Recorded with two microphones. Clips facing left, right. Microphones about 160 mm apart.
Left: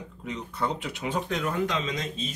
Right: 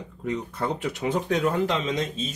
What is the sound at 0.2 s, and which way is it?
Speech, 45° right (ahead or behind).